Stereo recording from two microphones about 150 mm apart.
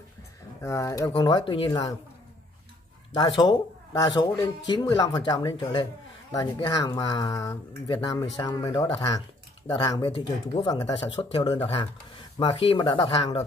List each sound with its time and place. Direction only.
0.6 s speech: 20° left (ahead or behind); by 1.8 s 35° left (ahead or behind)
3.2 s speech: 30° left (ahead or behind)
8.8 s speech: 35° left (ahead or behind)